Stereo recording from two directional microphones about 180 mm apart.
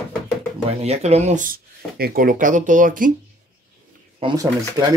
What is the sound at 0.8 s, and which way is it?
Speech, 35° right (ahead or behind).